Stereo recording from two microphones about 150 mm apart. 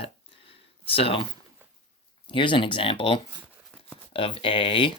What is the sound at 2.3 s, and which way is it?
Speech, 35° left (ahead or behind).